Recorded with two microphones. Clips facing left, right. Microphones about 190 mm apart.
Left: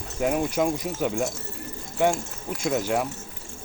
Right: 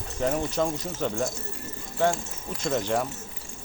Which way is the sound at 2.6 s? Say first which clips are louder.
Left 1 dB; 5° left (ahead or behind).